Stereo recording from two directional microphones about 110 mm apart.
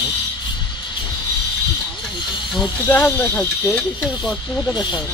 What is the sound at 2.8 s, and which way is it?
Speech, 20° left (ahead or behind).